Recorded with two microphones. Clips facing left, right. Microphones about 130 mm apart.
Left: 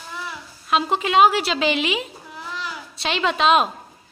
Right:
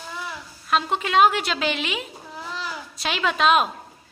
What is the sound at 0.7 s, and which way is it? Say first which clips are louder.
A woman's voice: left 2 dB; 5° left (ahead or behind).